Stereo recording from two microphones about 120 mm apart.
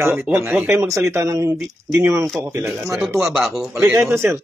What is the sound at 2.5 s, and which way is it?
Speech, 10° right (ahead or behind).